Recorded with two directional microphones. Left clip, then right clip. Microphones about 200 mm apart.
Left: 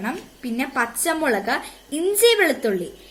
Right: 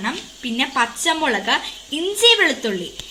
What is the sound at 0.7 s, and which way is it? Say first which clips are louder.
Speech: right 2 dB; 5° right (ahead or behind).